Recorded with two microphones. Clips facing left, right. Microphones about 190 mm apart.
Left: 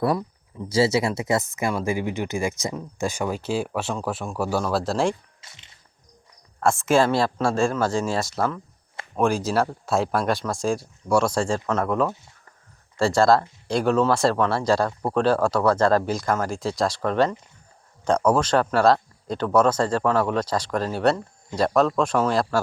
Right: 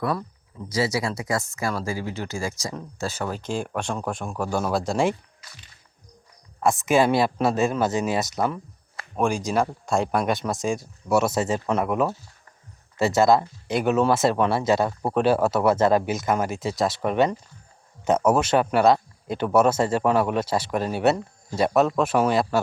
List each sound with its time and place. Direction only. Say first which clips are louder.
0.7 s speech: left 4 dB; 25° left (ahead or behind); by 5.1 s centre (ahead or behind)
5.4 s music: right 1 dB; 25° left (ahead or behind)
6.7 s speech: even; 15° right (ahead or behind)
9.1 s speech: left 1 dB; centre (ahead or behind)
11.1 s speech: left 1 dB; 30° left (ahead or behind)
11.4 s speech: even; 10° right (ahead or behind)
13.0 s speech: even; 20° right (ahead or behind)
13.7 s speech: even; 5° right (ahead or behind)
14.3 s speech: even; 20° right (ahead or behind)
15.1 s speech: even; 5° right (ahead or behind)
15.5 s speech: even; 25° right (ahead or behind)
16.0 s speech: even; 5° right (ahead or behind)
17.0 s speech: right 1 dB; 15° right (ahead or behind)